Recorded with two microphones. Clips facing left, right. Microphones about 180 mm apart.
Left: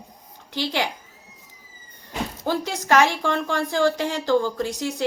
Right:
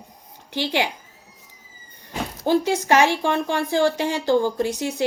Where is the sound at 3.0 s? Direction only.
20° right (ahead or behind).